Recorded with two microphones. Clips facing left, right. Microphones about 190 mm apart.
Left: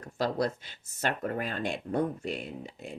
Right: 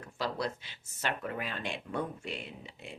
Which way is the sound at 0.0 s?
45° left (ahead or behind).